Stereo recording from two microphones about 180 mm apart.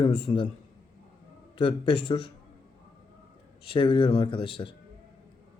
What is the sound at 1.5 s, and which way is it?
Speech, 30° left (ahead or behind).